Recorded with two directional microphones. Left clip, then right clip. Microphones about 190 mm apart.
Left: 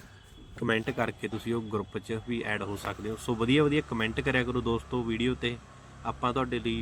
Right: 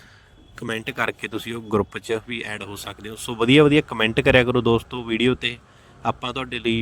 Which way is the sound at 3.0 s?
50° right (ahead or behind).